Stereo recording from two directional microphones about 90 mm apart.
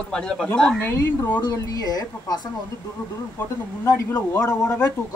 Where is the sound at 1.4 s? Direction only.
45° left (ahead or behind).